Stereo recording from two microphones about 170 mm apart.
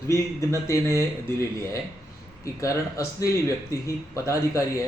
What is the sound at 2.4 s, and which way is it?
A man's voice, 20° left (ahead or behind).